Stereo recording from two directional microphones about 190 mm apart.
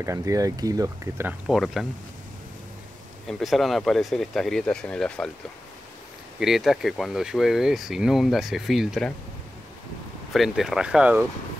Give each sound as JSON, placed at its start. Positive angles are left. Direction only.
{"t": 0.0, "sound": "speech", "side_deg": -15}
{"t": 1.5, "sound": "speech", "side_deg": 0}
{"t": 3.3, "sound": "speech", "side_deg": 0}
{"t": 6.4, "sound": "speech", "side_deg": 0}
{"t": 10.3, "sound": "speech", "side_deg": 0}